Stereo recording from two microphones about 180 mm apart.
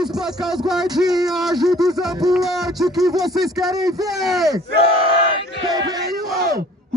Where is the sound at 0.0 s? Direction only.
Centre (ahead or behind).